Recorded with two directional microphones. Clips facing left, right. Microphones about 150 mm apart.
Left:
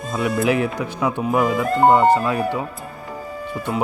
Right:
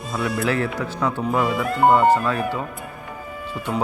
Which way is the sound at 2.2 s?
15° left (ahead or behind).